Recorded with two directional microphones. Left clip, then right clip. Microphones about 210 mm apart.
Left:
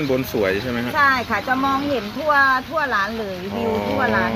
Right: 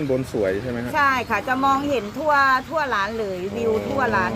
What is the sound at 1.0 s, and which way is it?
Speech, 30° right (ahead or behind).